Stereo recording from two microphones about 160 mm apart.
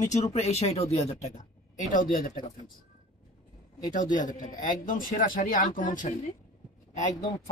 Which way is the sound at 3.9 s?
55° left (ahead or behind).